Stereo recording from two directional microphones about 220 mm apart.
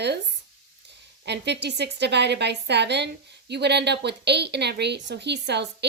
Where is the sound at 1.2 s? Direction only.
50° right (ahead or behind).